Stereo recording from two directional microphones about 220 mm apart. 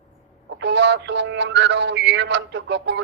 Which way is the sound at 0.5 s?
50° right (ahead or behind).